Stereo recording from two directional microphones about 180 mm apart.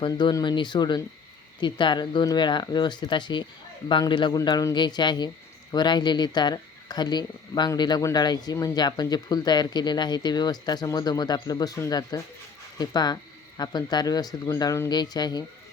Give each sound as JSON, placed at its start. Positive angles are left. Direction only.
{"t": 0.0, "sound": "speech", "side_deg": 25}